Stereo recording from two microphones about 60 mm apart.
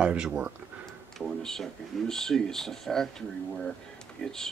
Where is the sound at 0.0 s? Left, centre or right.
Centre.